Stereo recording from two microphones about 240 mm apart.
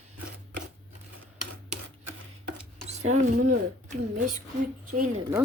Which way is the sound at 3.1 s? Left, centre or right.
Right.